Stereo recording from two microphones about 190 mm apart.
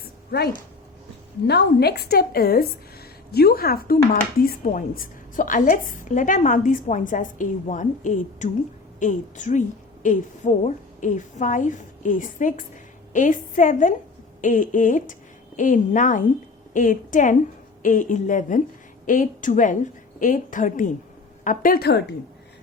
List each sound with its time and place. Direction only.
0.3 s a woman's voice: 55° left (ahead or behind)